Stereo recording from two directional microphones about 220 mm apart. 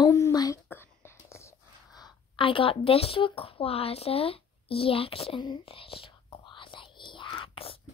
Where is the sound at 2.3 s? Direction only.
25° left (ahead or behind).